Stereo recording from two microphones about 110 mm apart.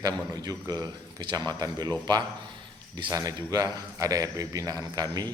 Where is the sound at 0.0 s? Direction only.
35° right (ahead or behind).